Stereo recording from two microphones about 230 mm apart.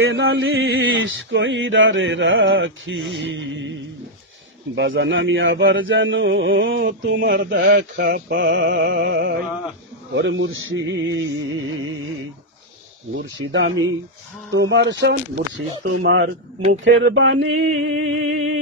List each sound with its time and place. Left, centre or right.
0.1 s mantra: right
4.7 s speech: right
6.7 s mantra: right
13.1 s speech: right
14.5 s mantra: right